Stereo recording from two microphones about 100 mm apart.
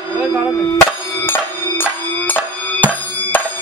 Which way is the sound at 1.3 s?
20° left (ahead or behind).